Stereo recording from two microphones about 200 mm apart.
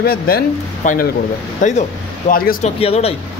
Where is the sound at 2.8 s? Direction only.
30° left (ahead or behind).